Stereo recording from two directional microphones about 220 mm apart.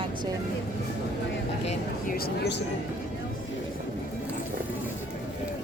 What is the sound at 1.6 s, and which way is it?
Speech, 40° left (ahead or behind).